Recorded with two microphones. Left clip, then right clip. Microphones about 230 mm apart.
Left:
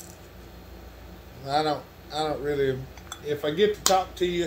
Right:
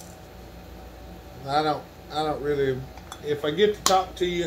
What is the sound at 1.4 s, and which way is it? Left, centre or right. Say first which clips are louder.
A man's voice: right 1 dB; centre.